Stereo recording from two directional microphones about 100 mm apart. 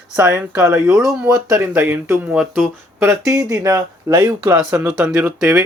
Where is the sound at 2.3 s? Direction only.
5° right (ahead or behind).